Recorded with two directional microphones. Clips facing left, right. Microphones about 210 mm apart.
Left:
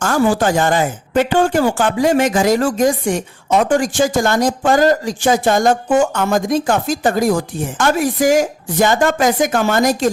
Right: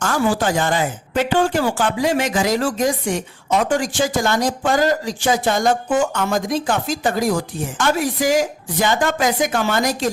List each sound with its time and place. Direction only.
0.0 s speech: 45° left (ahead or behind)